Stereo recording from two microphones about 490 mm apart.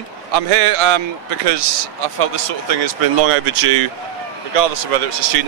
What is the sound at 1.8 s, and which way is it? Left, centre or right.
Speech, right.